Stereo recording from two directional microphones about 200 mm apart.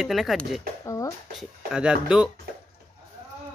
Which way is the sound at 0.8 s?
15° left (ahead or behind).